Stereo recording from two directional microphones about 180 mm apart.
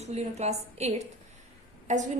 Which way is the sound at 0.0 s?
35° right (ahead or behind).